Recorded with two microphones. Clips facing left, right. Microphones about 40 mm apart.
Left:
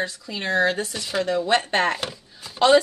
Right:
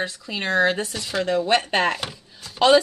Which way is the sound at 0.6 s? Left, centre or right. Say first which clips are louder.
Right 1 dB; right.